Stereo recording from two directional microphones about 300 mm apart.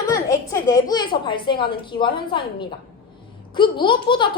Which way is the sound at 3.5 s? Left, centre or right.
Centre.